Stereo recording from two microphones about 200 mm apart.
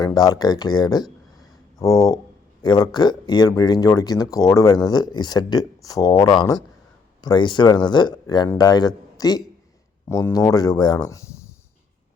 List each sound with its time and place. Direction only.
0.0 s speech: 20° left (ahead or behind)